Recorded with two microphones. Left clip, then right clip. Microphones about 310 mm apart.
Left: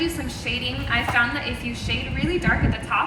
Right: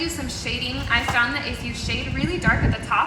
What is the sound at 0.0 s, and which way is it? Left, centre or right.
A woman's voice, centre.